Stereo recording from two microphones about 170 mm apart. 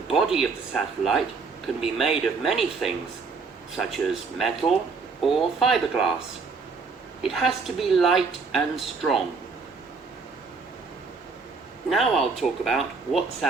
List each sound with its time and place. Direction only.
0.1 s a woman's voice: 5° right (ahead or behind)
7.2 s a woman's voice: centre (ahead or behind)
11.9 s a woman's voice: centre (ahead or behind)